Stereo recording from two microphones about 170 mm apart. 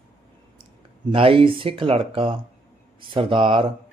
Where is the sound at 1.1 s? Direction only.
30° right (ahead or behind).